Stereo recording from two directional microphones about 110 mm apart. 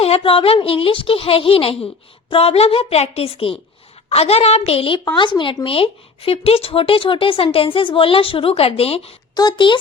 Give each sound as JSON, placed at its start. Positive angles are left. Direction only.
{"t": 0.0, "sound": "a woman's voice", "side_deg": 60}
{"t": 5.1, "sound": "speech", "side_deg": 45}
{"t": 5.6, "sound": "speech", "side_deg": 60}
{"t": 9.3, "sound": "speech", "side_deg": 40}